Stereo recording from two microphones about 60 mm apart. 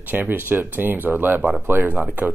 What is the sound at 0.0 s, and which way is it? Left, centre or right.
Speech, right.